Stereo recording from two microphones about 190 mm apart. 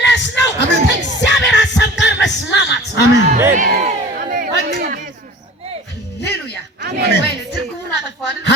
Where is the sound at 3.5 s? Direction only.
40° right (ahead or behind).